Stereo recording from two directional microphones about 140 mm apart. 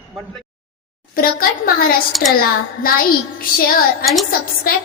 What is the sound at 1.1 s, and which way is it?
Speech, 90° left.